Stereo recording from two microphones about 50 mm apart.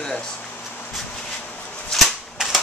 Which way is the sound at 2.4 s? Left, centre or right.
Centre.